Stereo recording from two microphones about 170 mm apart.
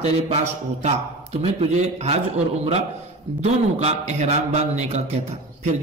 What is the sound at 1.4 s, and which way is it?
Speech, 35° right (ahead or behind).